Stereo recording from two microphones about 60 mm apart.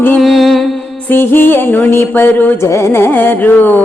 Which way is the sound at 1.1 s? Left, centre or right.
Left.